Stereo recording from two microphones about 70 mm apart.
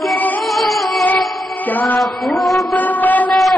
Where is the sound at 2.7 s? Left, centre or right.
Left.